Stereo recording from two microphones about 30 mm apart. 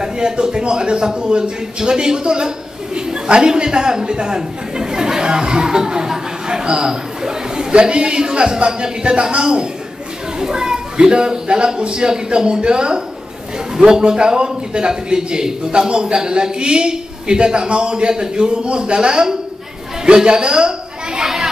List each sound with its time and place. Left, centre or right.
0.0 s a man's voice: right
4.4 s chatter: right
7.9 s a man's voice: right